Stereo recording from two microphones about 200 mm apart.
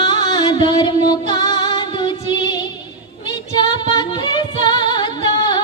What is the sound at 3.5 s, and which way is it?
Female singing, 25° left (ahead or behind).